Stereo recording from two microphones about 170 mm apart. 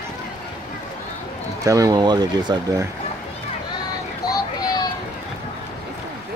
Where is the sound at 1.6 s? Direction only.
20° right (ahead or behind).